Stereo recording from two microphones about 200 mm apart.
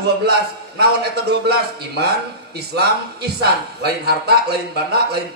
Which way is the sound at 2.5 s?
55° right (ahead or behind).